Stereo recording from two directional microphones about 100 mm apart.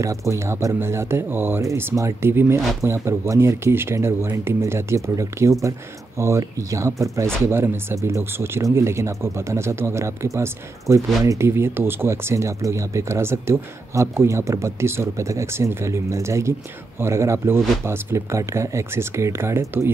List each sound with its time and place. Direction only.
0.0 s speech: 30° right (ahead or behind)
1.6 s speech: 30° right (ahead or behind)